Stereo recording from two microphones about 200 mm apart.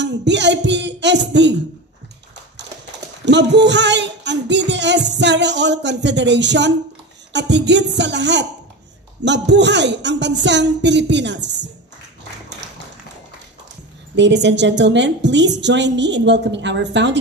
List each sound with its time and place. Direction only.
0.0 s music: 60° right (ahead or behind)
3.3 s music: 60° right (ahead or behind)
7.3 s a woman's voice: 60° right (ahead or behind)
14.1 s a woman's voice: 60° right (ahead or behind)